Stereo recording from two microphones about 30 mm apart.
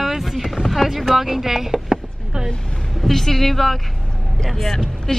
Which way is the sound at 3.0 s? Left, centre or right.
Centre.